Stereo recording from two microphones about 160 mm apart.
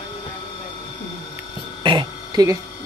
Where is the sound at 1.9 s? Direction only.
25° right (ahead or behind).